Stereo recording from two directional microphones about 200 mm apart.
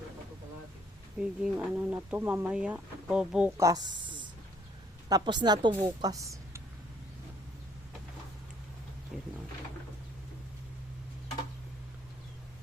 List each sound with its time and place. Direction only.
1.2 s speech: 10° right (ahead or behind)
3.6 s a woman's voice: 20° right (ahead or behind)
9.1 s speech: centre (ahead or behind)